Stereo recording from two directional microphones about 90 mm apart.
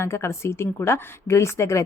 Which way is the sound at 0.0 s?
30° left (ahead or behind).